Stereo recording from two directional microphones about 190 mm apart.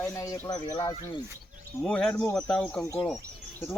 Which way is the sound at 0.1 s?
15° left (ahead or behind).